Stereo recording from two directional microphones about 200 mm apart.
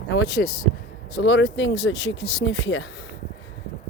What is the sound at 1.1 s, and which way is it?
Speech, 60° left (ahead or behind).